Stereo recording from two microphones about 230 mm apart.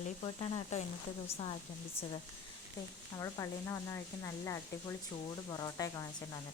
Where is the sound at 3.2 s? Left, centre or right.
Centre.